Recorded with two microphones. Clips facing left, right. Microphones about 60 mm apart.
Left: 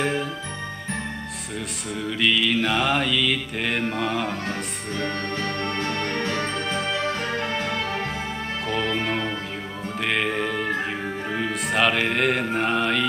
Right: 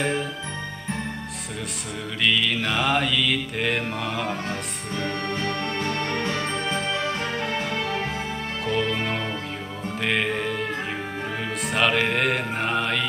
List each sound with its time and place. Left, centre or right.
2.2 s music: centre
5.0 s music: centre
7.2 s music: left
8.6 s music: centre
11.6 s music: centre